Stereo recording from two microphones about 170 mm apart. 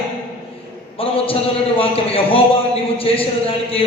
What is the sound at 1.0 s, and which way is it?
A man's voice, 35° left (ahead or behind).